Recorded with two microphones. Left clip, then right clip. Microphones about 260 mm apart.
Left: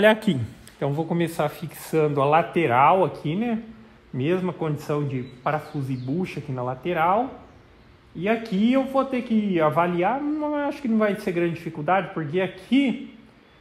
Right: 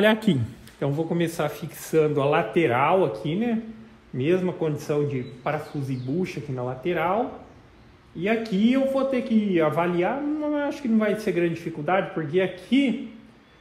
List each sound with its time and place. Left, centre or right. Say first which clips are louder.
0.0 s a man's voice: left 2 dB; left
8.2 s a man's voice: even; left